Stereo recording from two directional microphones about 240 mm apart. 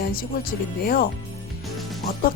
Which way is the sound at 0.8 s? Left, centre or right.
Left.